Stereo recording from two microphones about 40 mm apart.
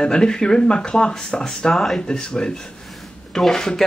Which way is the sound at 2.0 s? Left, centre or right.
Left.